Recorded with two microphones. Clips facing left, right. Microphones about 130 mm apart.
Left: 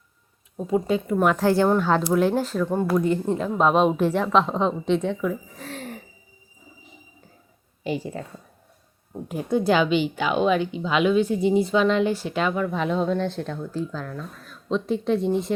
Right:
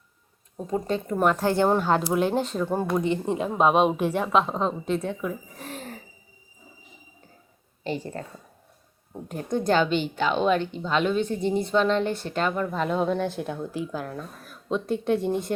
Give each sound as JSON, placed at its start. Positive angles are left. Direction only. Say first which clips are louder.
{"t": 0.5, "sound": "speech", "louder": "left 4 dB", "side_deg": 5}
{"t": 1.4, "sound": "speech", "louder": "left 2 dB", "side_deg": -20}
{"t": 3.2, "sound": "a woman's voice", "louder": "left 1 dB", "side_deg": -15}
{"t": 7.9, "sound": "speech", "louder": "left 3 dB", "side_deg": 5}